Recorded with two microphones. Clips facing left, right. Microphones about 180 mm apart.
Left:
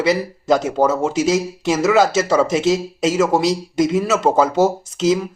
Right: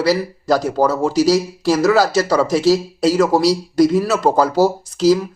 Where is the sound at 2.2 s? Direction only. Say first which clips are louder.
Right 1 dB; centre (ahead or behind).